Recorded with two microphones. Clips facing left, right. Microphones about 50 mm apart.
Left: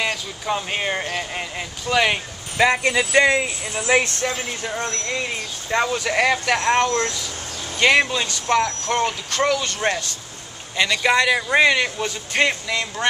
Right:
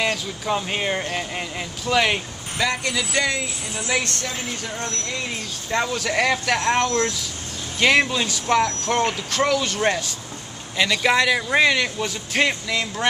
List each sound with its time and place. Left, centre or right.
0.0 s speech: centre
2.5 s speech: left
5.7 s speech: centre